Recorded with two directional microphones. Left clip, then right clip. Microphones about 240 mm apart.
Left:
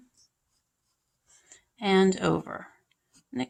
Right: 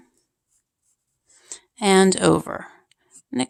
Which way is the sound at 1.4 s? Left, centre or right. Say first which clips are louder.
Right 8 dB; right.